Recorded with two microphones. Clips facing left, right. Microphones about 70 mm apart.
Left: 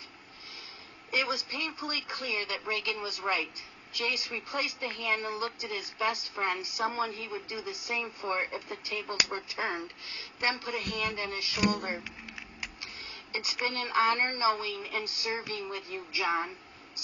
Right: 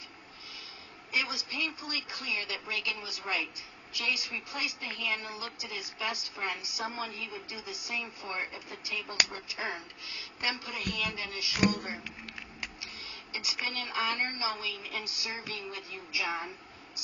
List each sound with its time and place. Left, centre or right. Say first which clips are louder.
1.1 s a woman's voice: left 3 dB; left